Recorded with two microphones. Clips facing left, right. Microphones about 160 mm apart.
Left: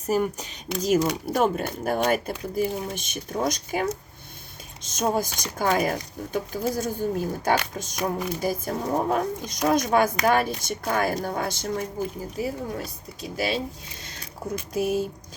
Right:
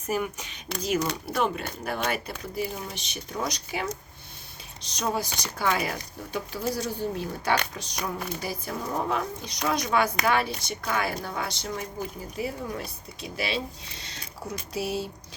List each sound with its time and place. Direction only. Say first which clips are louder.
0.1 s speech: left 5 dB; 40° left (ahead or behind)
14.0 s mechanisms: left 4 dB; 50° left (ahead or behind)